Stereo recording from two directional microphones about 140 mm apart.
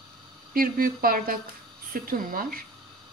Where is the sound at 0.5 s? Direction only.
90° right.